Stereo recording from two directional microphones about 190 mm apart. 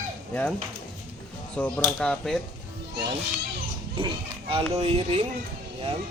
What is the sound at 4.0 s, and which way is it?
Speech, 30° right (ahead or behind).